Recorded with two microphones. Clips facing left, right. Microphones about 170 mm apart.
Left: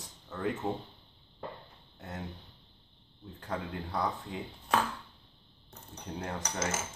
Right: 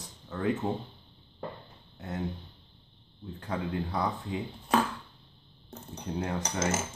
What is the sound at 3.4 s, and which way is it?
Speech, 5° right (ahead or behind).